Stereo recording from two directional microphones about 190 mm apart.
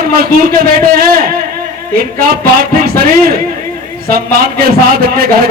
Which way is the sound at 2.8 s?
50° right (ahead or behind).